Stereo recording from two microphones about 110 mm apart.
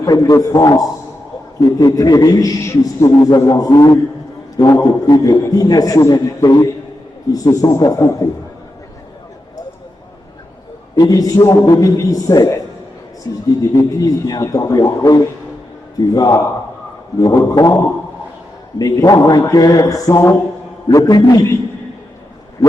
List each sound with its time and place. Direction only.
0.0 s a man's voice: 35° left (ahead or behind)
10.9 s a man's voice: 35° left (ahead or behind)
13.2 s a sound: 30° left (ahead or behind)
13.6 s a man's voice: 30° left (ahead or behind)
18.8 s a man's voice: 35° left (ahead or behind)